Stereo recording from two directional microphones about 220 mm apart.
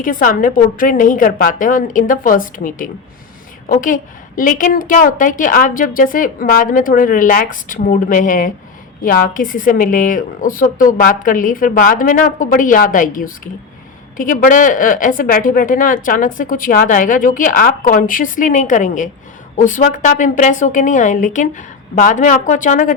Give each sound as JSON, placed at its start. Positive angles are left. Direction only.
{"t": 0.0, "sound": "a woman's voice", "side_deg": 40}